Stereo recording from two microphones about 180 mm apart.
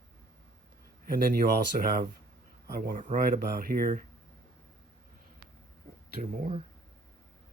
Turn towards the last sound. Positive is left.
turn(degrees=-35)  # may be behind; listen again after turning